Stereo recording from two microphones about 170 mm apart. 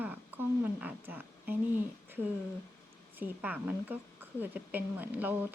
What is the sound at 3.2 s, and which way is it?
A woman's voice, 10° right (ahead or behind).